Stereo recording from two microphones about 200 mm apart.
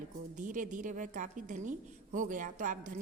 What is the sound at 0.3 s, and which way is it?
A woman's voice, 40° right (ahead or behind).